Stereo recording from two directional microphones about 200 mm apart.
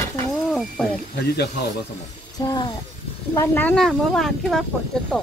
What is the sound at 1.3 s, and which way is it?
Speech, 55° left (ahead or behind).